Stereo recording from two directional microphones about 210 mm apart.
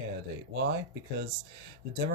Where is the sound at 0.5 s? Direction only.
55° right (ahead or behind).